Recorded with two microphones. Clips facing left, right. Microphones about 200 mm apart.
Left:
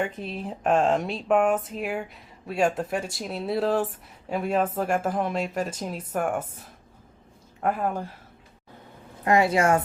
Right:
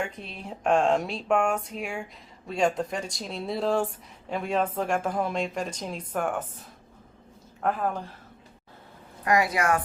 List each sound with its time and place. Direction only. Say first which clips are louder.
0.0 s speech: left 4 dB; centre (ahead or behind)
7.6 s speech: left 1 dB; 10° left (ahead or behind)
9.2 s a woman's voice: left 4 dB; 25° left (ahead or behind)